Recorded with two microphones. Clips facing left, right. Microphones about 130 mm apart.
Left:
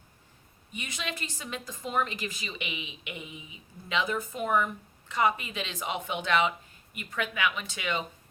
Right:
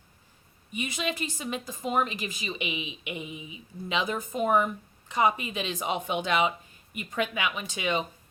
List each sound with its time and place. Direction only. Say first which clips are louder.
0.7 s a woman's voice: right 6 dB; 15° right (ahead or behind)